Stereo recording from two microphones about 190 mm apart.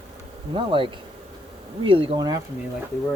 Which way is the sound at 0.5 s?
25° right (ahead or behind).